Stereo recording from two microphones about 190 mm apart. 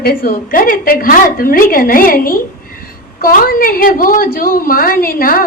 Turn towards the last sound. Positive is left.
turn(degrees=50)  # may be behind; listen again after turning